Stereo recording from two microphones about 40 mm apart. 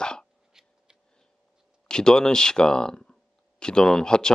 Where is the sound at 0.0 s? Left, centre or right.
Left.